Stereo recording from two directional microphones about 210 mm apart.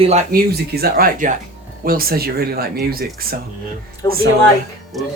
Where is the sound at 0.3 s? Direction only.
45° right (ahead or behind).